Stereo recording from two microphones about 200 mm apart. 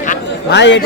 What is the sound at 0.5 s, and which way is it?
Speech, 60° left (ahead or behind).